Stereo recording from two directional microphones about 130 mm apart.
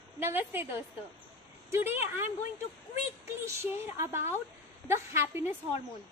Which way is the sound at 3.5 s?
20° right (ahead or behind).